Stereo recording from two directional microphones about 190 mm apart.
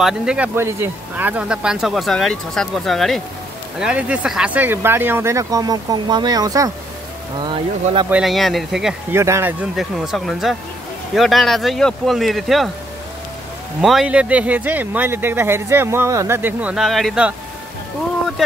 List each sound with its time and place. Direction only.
0.0 s speech: 5° right (ahead or behind); by 8.1 s 25° right (ahead or behind)
8.1 s speech: centre (ahead or behind)
9.1 s speech: 15° right (ahead or behind)
13.7 s speech: 5° right (ahead or behind)